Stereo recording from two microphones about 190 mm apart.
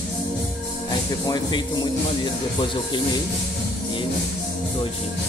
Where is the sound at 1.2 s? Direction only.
20° left (ahead or behind).